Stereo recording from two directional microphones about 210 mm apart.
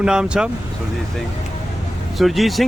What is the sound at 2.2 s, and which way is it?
Speech, centre (ahead or behind).